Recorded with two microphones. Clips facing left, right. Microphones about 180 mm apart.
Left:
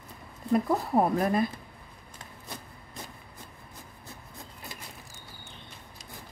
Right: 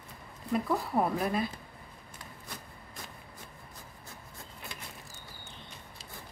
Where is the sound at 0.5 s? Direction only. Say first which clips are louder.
Left 5 dB; 45° left (ahead or behind).